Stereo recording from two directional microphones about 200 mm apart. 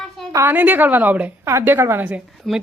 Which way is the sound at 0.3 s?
10° right (ahead or behind).